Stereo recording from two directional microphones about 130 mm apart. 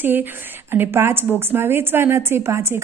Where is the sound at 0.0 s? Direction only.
15° right (ahead or behind).